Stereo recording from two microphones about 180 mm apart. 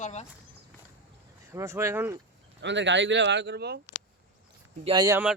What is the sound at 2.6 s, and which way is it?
Speech, 80° right.